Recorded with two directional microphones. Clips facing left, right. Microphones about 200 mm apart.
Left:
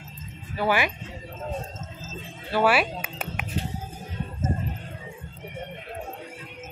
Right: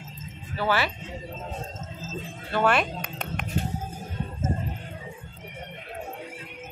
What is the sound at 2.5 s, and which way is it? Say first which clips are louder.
Speech: left 2 dB; 5° left (ahead or behind).